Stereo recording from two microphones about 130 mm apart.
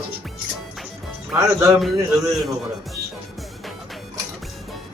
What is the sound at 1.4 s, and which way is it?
Speech, 25° right (ahead or behind).